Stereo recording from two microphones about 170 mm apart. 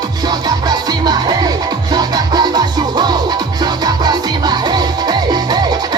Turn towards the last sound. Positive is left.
turn(degrees=-25)  # may be behind; listen again after turning